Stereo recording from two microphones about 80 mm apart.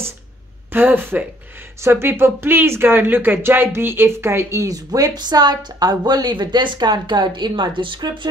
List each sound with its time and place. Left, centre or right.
0.7 s speech: right